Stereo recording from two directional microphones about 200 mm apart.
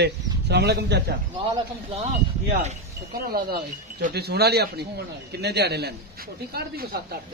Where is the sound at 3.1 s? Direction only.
50° right (ahead or behind).